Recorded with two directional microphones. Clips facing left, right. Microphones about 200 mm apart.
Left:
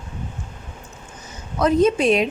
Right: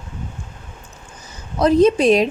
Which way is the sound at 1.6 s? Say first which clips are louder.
Right 3 dB; 35° right (ahead or behind).